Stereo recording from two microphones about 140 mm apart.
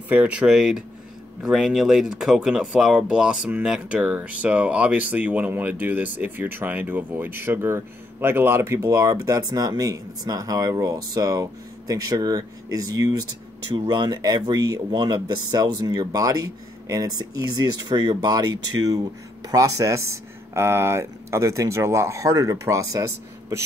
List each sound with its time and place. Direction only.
0.1 s speech: 10° right (ahead or behind)